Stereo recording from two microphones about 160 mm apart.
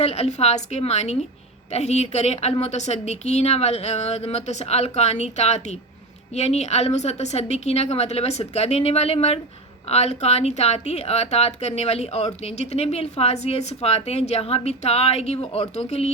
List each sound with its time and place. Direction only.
0.0 s a woman's voice: 40° left (ahead or behind)